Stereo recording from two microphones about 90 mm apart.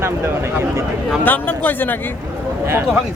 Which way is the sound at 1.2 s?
20° left (ahead or behind).